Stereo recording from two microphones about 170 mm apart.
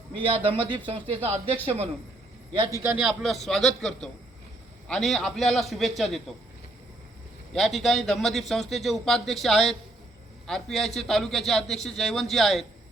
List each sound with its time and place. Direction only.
0.1 s a man's voice: 30° right (ahead or behind)
2.5 s a man's voice: 25° right (ahead or behind)
2.8 s a man's voice: 10° right (ahead or behind)
7.5 s a man's voice: centre (ahead or behind)